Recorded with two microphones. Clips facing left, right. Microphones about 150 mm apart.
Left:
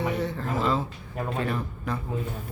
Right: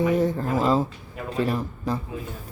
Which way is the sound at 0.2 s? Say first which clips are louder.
Right 5 dB; 40° right (ahead or behind).